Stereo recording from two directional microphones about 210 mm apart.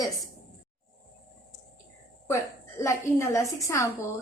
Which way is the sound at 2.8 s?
15° left (ahead or behind).